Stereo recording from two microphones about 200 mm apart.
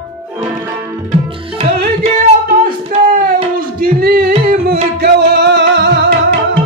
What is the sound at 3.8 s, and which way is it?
Music, 50° right (ahead or behind).